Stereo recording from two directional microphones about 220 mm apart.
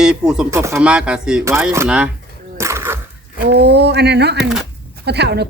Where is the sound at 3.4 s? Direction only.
50° right (ahead or behind).